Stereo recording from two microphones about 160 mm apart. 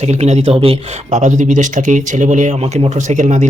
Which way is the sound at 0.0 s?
45° right (ahead or behind).